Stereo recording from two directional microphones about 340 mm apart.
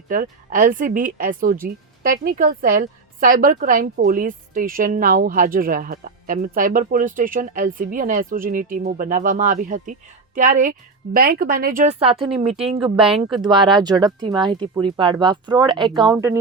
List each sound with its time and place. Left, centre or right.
0.1 s a woman's voice: right; by 16.4 s centre